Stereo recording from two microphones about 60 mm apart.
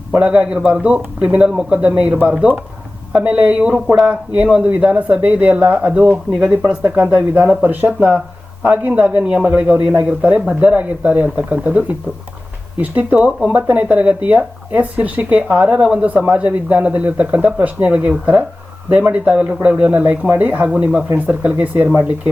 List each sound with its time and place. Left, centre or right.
0.1 s a man's voice: right
12.8 s speech: right
19.6 s speech: right
20.7 s speech: centre